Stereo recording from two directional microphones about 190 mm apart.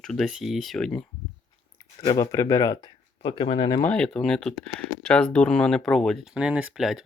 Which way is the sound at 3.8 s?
5° left (ahead or behind).